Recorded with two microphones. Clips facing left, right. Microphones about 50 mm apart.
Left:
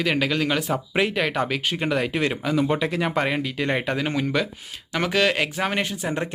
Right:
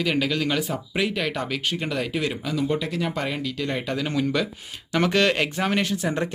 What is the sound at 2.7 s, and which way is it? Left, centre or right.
Speech, left.